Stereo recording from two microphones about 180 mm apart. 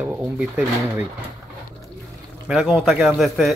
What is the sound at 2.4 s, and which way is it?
Speech, centre (ahead or behind).